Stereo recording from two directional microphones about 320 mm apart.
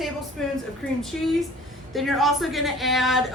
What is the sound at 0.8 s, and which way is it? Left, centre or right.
A woman's voice, centre.